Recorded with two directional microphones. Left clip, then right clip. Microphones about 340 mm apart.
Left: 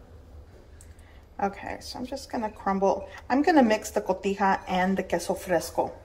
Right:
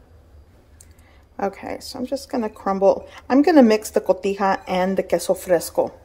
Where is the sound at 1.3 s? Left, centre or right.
Centre.